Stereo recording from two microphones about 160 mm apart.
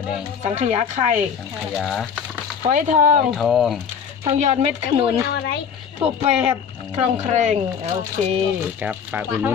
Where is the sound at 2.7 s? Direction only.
50° right (ahead or behind).